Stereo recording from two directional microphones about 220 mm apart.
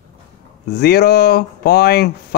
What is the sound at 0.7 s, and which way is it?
Speech, 45° left (ahead or behind).